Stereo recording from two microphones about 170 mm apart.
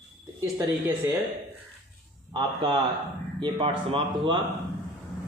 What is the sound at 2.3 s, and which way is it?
Speech, 25° right (ahead or behind).